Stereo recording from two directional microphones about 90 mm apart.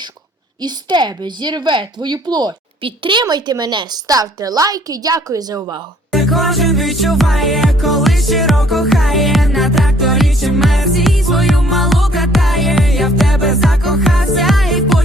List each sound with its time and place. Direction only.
0.6 s speech: 55° right (ahead or behind)
2.8 s a woman's voice: 65° right (ahead or behind); by 5.8 s 50° right (ahead or behind)
6.1 s music: centre (ahead or behind)